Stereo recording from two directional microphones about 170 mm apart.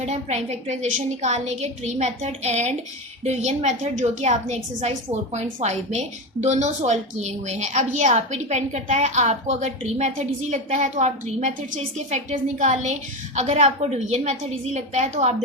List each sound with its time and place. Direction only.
0.0 s a woman's voice: 40° right (ahead or behind)